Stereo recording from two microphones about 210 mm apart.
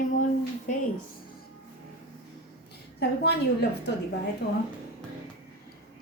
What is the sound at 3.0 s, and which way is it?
A woman's voice, 50° left (ahead or behind).